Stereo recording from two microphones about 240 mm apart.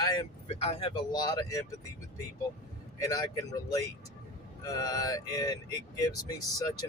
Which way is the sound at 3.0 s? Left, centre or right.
Centre.